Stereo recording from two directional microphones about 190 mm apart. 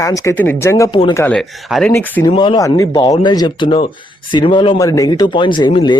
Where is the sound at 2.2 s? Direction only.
25° left (ahead or behind).